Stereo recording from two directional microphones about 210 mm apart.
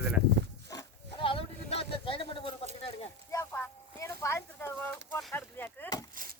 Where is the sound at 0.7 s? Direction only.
25° left (ahead or behind).